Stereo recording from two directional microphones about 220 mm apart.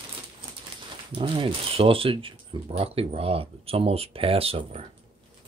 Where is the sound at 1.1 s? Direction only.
25° right (ahead or behind).